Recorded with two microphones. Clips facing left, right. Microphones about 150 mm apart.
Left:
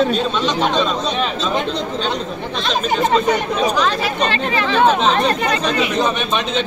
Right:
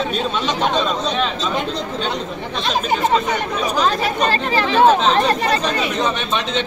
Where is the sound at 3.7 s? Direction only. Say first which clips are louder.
Even; 40° right (ahead or behind).